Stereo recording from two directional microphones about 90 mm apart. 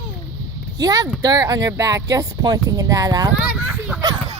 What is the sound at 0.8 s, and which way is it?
Speech, 45° right (ahead or behind).